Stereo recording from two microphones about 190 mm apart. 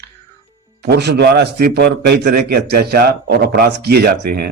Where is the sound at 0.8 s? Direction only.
60° right (ahead or behind).